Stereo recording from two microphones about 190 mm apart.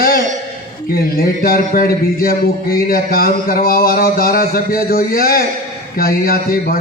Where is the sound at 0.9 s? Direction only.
50° left (ahead or behind).